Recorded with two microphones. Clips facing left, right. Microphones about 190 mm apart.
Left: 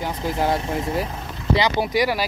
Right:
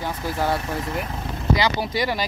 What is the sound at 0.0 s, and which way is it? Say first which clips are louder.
Speech: left 2 dB; 20° left (ahead or behind).